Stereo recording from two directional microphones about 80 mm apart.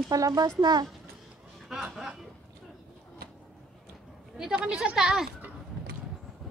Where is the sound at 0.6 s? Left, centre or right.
Right.